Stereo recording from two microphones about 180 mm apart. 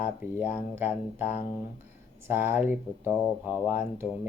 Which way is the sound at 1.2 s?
40° left (ahead or behind).